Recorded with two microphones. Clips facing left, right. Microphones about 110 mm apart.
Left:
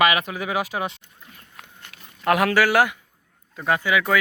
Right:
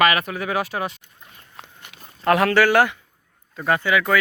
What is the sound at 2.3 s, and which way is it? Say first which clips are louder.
A man's voice: right 2 dB; 15° left (ahead or behind).